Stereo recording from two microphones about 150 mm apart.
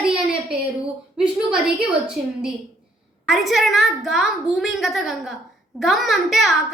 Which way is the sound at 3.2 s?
Centre (ahead or behind).